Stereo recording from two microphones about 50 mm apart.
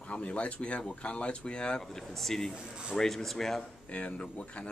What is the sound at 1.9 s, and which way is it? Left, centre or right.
Speech, centre.